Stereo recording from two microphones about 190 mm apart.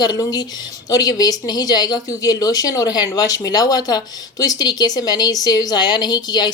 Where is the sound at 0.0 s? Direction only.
20° left (ahead or behind).